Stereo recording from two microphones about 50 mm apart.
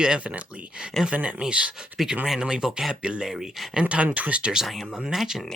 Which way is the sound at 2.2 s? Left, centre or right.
Centre.